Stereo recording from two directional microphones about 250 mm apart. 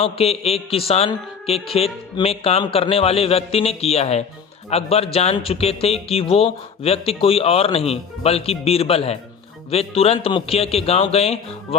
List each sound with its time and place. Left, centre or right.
0.0 s speech: left